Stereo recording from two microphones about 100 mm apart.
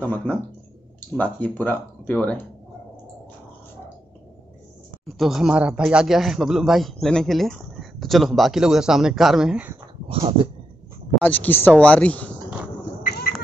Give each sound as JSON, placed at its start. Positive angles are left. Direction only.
{"t": 0.0, "sound": "speech", "side_deg": 15}
{"t": 5.0, "sound": "a man's voice", "side_deg": 0}
{"t": 10.0, "sound": "dog", "side_deg": -70}
{"t": 11.1, "sound": "speech", "side_deg": 15}